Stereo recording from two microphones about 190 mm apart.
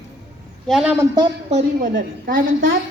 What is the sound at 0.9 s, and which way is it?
Speech, 15° right (ahead or behind).